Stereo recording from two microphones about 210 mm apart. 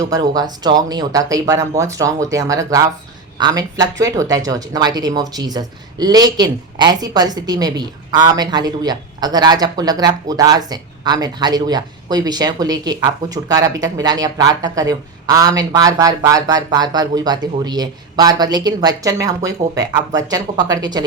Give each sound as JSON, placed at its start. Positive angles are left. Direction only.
{"t": 0.0, "sound": "speech", "side_deg": -15}